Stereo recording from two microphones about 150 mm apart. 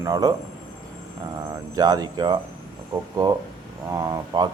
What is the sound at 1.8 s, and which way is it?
Speech, 25° right (ahead or behind).